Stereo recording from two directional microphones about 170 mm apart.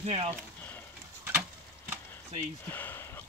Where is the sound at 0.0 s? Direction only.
35° right (ahead or behind).